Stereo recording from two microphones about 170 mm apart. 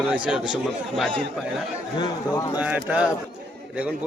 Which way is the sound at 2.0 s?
20° left (ahead or behind).